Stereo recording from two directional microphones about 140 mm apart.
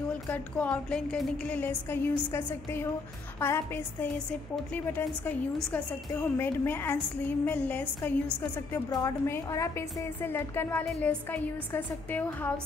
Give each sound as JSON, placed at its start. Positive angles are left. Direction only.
{"t": 0.3, "sound": "a woman's voice", "side_deg": 10}